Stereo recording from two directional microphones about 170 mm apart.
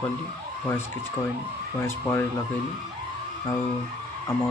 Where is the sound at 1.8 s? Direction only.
15° left (ahead or behind).